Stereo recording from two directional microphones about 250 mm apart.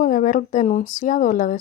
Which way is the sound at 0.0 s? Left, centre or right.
Left.